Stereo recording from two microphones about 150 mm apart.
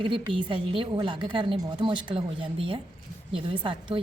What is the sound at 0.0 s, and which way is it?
A woman's voice, 30° right (ahead or behind).